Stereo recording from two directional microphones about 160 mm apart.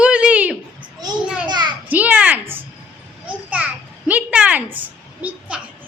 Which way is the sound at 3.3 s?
10° right (ahead or behind).